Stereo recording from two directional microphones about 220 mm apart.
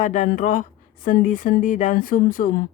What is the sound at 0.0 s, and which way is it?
A woman's voice, 35° left (ahead or behind).